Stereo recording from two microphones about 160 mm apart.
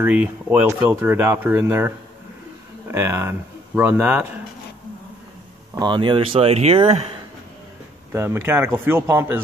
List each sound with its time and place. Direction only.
0.0 s speech: 10° right (ahead or behind)
5.8 s speech: 30° right (ahead or behind)
8.1 s speech: 15° right (ahead or behind)